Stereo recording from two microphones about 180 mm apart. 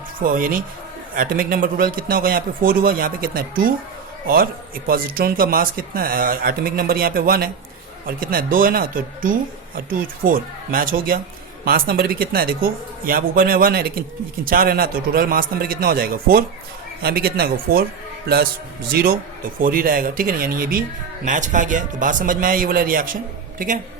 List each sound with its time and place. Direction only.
0.2 s speech: 50° right (ahead or behind)
18.9 s speech: 55° right (ahead or behind)